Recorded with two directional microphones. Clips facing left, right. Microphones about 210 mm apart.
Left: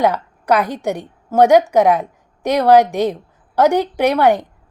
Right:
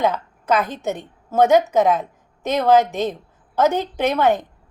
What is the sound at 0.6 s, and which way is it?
A woman's voice, 15° left (ahead or behind).